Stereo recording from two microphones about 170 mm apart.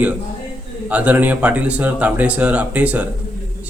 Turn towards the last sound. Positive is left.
turn(degrees=-10)  # may be behind; listen again after turning